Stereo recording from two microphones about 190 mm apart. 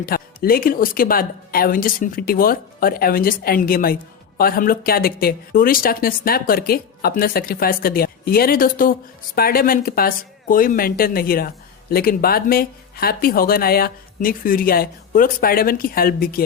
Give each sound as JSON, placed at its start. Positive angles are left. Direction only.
{"t": 0.0, "sound": "speech", "side_deg": 50}